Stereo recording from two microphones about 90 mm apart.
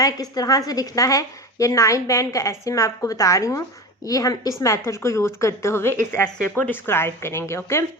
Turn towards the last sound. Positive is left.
turn(degrees=30)  # may be behind; listen again after turning